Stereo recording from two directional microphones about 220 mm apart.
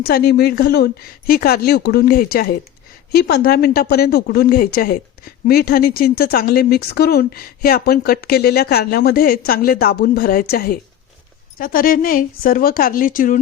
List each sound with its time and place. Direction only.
0.0 s a woman's voice: 45° left (ahead or behind)